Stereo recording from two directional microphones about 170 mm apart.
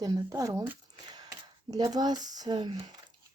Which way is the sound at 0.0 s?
20° right (ahead or behind).